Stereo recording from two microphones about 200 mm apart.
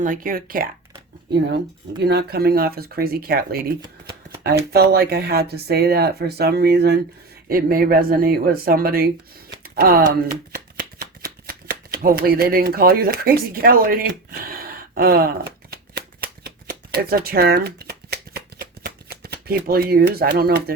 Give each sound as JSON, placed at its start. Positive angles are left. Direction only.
{"t": 0.0, "sound": "speech", "side_deg": -40}
{"t": 2.0, "sound": "speech", "side_deg": -55}
{"t": 4.7, "sound": "speech", "side_deg": -50}
{"t": 9.6, "sound": "a sound", "side_deg": -50}
{"t": 10.5, "sound": "shuffling cards", "side_deg": -45}